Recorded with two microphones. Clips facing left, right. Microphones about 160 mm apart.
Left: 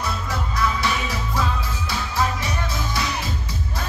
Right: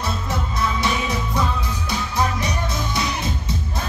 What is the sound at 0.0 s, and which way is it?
Music, 20° right (ahead or behind).